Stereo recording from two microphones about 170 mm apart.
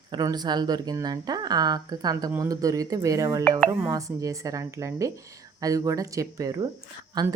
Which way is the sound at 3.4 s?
5° left (ahead or behind).